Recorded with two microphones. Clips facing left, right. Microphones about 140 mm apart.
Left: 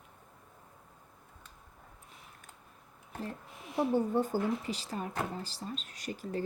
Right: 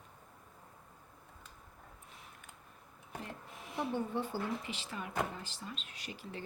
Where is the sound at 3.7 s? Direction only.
40° left (ahead or behind).